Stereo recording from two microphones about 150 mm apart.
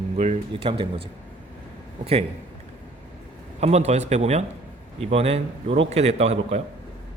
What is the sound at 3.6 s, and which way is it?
Speech, 45° right (ahead or behind).